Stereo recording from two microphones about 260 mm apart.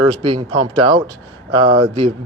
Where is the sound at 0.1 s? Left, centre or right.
Centre.